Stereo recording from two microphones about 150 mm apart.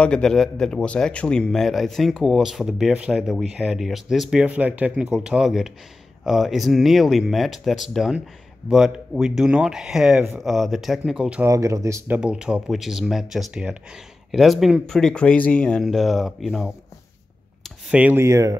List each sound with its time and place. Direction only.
0.0 s a man's voice: 5° left (ahead or behind)
11.4 s speech: 20° right (ahead or behind)
12.2 s a man's voice: 5° right (ahead or behind)